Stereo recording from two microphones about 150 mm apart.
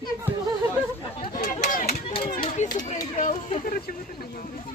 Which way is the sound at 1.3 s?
60° left (ahead or behind).